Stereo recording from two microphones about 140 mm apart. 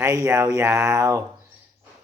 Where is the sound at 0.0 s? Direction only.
20° right (ahead or behind).